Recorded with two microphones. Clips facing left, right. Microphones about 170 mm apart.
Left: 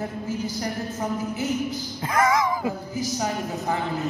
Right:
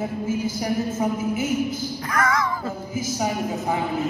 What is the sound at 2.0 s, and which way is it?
Snicker, 25° left (ahead or behind).